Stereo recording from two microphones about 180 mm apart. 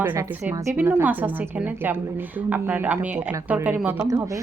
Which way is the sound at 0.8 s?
10° right (ahead or behind).